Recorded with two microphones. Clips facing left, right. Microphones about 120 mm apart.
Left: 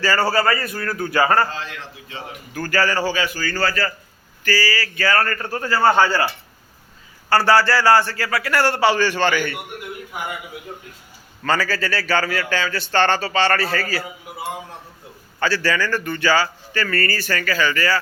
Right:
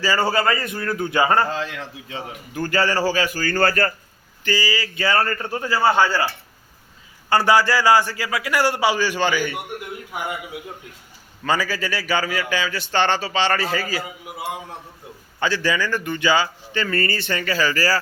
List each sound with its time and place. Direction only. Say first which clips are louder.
0.0 s speech: left 1 dB; 15° right (ahead or behind)
2.5 s a man's voice: even; 20° right (ahead or behind); by 3.9 s 55° right (ahead or behind)
4.4 s speech: left 1 dB; 20° right (ahead or behind)
7.3 s a man's voice: left 1 dB; 20° right (ahead or behind)
11.4 s a man's voice: left 1 dB; 15° right (ahead or behind)
15.4 s speech: left 1 dB; 15° right (ahead or behind); by 18.0 s 35° right (ahead or behind)